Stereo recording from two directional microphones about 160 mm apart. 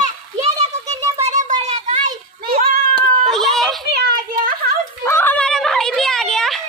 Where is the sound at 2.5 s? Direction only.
65° right (ahead or behind).